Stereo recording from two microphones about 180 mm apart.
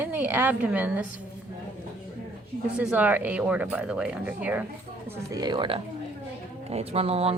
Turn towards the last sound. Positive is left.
turn(degrees=-35)  # may be behind; listen again after turning